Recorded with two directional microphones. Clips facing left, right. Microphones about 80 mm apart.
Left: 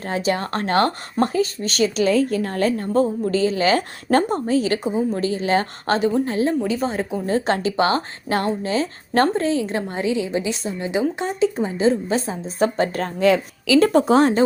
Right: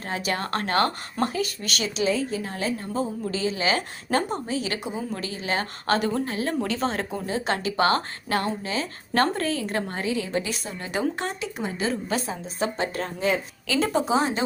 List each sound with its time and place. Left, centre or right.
0.0 s a woman's voice: left
2.1 s a woman's voice: left
6.6 s a woman's voice: centre
7.3 s speech: left; by 11.3 s centre
11.3 s a woman's voice: left
13.1 s a woman's voice: left